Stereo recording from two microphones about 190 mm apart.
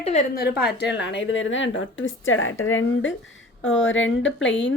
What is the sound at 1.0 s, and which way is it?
A woman's voice, 70° left (ahead or behind).